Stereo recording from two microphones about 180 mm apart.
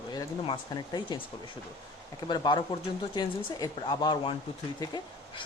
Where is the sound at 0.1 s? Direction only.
25° left (ahead or behind).